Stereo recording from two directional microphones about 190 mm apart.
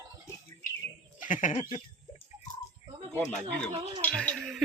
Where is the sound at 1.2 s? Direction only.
45° left (ahead or behind).